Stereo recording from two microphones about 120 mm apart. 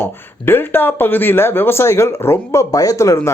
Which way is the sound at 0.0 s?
20° left (ahead or behind).